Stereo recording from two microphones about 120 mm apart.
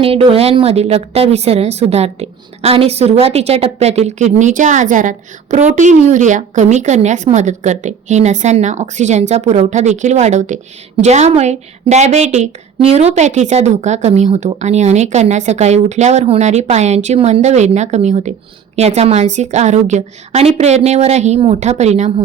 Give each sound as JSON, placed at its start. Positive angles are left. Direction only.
{"t": 0.0, "sound": "a woman's voice", "side_deg": -50}
{"t": 10.9, "sound": "a woman's voice", "side_deg": -70}
{"t": 13.1, "sound": "a woman's voice", "side_deg": -75}
{"t": 18.8, "sound": "a woman's voice", "side_deg": -65}